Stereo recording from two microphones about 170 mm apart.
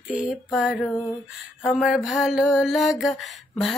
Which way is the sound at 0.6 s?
5° right (ahead or behind).